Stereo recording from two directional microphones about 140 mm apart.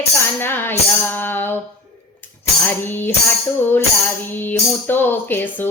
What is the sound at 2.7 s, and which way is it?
Music, 15° left (ahead or behind).